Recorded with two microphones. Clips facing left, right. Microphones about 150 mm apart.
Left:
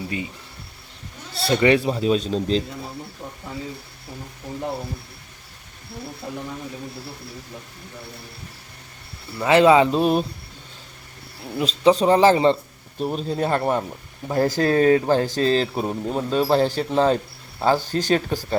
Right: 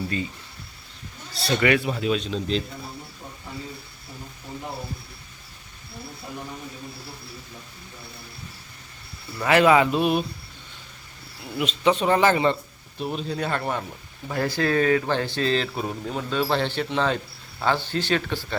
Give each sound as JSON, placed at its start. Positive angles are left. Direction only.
{"t": 1.5, "sound": "speech", "side_deg": 30}
{"t": 9.4, "sound": "speech", "side_deg": 25}
{"t": 11.4, "sound": "speech", "side_deg": 35}